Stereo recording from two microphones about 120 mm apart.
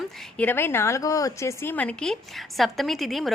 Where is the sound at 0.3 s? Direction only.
15° left (ahead or behind).